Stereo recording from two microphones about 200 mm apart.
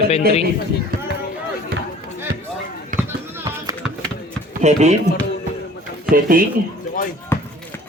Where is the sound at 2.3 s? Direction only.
50° right (ahead or behind).